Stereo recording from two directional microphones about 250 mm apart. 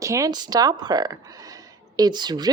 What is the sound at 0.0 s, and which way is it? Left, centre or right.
Speech, centre.